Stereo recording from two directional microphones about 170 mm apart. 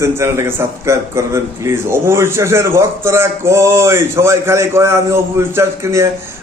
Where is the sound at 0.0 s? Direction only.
15° right (ahead or behind).